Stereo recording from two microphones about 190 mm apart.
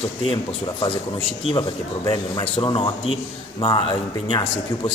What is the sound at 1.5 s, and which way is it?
Speech, 25° left (ahead or behind).